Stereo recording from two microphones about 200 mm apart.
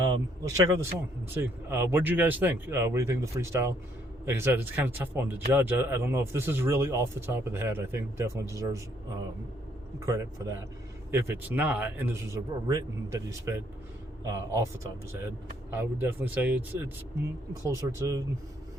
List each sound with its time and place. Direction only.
0.0 s speech: 15° right (ahead or behind)
10.1 s speech: 15° right (ahead or behind)
15.7 s speech: 10° right (ahead or behind)